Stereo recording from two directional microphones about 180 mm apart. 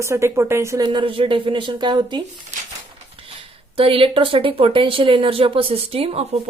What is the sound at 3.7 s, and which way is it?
Speech, 30° right (ahead or behind).